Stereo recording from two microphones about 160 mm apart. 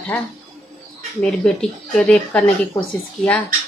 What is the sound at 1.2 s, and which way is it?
A woman's voice, 5° left (ahead or behind).